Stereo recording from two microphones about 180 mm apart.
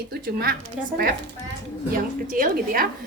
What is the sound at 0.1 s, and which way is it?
Speech, 60° right (ahead or behind).